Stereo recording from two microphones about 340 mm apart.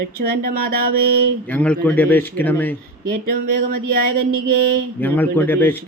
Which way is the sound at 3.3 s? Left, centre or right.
Right.